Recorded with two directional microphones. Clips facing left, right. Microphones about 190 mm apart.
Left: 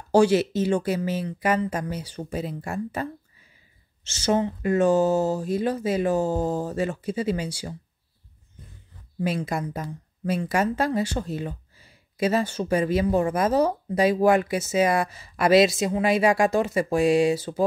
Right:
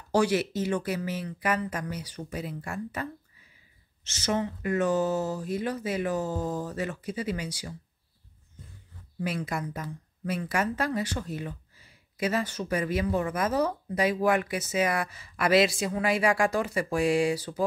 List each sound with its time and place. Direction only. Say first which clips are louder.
0.1 s speech: left 6 dB; 30° left (ahead or behind)
9.2 s speech: left 5 dB; 25° left (ahead or behind)